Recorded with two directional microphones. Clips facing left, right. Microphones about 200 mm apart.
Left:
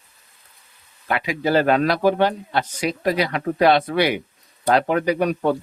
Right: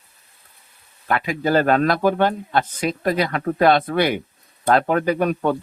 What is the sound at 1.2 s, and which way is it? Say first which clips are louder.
Speech: even; 50° right (ahead or behind).